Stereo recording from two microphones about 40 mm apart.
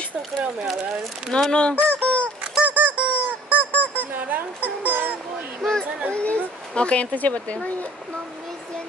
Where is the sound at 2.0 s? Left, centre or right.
Left.